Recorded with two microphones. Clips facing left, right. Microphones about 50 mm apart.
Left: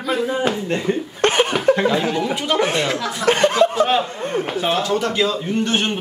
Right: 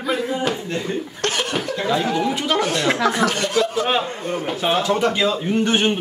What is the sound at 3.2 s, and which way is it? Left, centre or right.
Speech, left.